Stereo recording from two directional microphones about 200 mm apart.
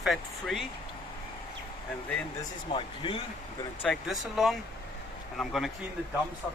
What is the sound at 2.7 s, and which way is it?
Speech, 25° left (ahead or behind).